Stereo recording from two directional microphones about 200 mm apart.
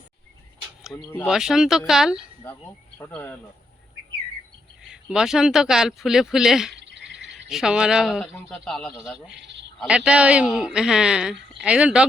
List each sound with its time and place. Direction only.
0.9 s speech: 5° left (ahead or behind)
3.0 s speech: 10° left (ahead or behind)
4.8 s speech: 5° right (ahead or behind)
6.7 s bird: 60° right (ahead or behind)
7.5 s speech: 5° right (ahead or behind)
9.4 s a sound: 60° right (ahead or behind)
9.8 s speech: 5° right (ahead or behind)